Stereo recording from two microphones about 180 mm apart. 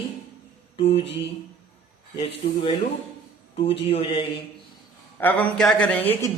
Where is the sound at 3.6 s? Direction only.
30° left (ahead or behind).